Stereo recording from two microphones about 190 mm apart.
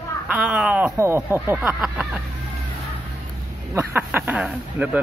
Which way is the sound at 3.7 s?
10° right (ahead or behind).